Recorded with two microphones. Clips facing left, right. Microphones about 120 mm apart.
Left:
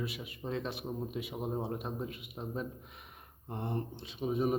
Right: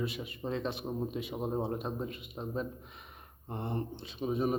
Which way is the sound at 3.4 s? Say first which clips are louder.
Right 1 dB; centre (ahead or behind).